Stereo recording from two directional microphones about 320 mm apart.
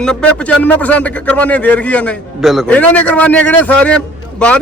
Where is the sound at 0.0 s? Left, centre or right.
Centre.